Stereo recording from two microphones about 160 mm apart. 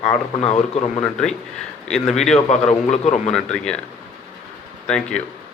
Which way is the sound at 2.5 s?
45° left (ahead or behind).